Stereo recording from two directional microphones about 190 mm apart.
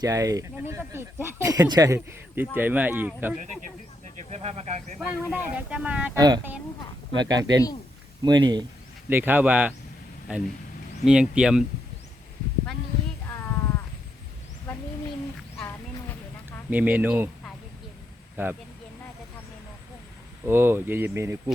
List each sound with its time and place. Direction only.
0.0 s speech: 15° right (ahead or behind)
4.3 s speech: 35° right (ahead or behind)
4.9 s speech: 5° right (ahead or behind)
6.1 s speech: 20° right (ahead or behind)
9.0 s speech: 10° right (ahead or behind)
15.5 s a sound: 10° left (ahead or behind)
16.6 s speech: 10° right (ahead or behind)
18.4 s speech: 10° right (ahead or behind)
20.5 s speech: 10° right (ahead or behind)